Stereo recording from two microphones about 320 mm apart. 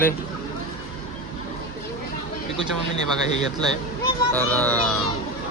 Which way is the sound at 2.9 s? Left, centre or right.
Left.